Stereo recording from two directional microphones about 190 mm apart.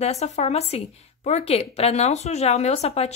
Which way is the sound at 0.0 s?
35° left (ahead or behind).